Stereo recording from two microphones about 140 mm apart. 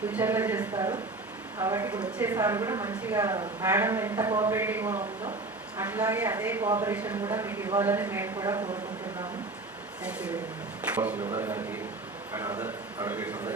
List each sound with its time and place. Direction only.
0.1 s a woman's voice: 15° right (ahead or behind)
10.0 s a woman's voice: 10° right (ahead or behind)